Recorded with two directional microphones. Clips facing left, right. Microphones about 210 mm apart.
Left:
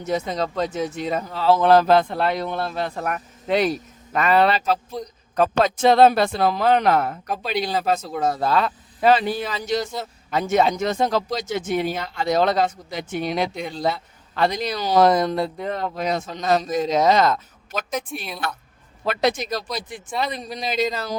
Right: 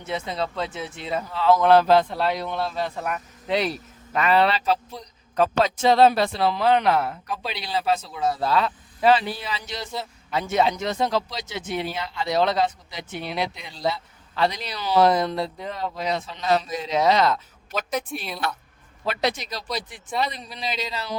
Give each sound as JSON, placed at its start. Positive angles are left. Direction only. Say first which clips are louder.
{"t": 0.0, "sound": "speech", "louder": "left 4 dB", "side_deg": 40}
{"t": 1.9, "sound": "speech", "louder": "left 1 dB", "side_deg": 55}
{"t": 19.0, "sound": "speech", "louder": "left 4 dB", "side_deg": 50}